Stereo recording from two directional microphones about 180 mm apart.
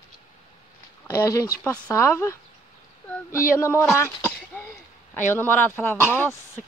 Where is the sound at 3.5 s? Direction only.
15° left (ahead or behind).